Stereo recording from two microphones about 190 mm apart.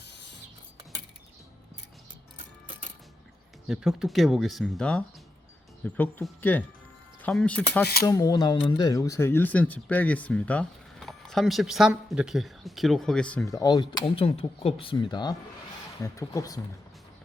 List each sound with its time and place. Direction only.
3.7 s speech: centre (ahead or behind)
8.0 s speech: 20° left (ahead or behind)